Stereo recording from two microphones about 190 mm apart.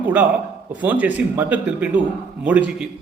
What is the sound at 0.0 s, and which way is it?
A man's voice, 10° right (ahead or behind).